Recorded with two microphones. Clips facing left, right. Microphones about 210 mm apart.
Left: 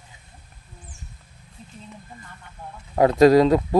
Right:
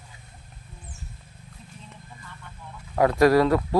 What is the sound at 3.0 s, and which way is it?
Speech, 20° left (ahead or behind).